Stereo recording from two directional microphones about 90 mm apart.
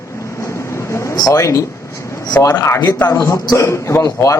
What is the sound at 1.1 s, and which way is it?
A man's voice, 45° left (ahead or behind).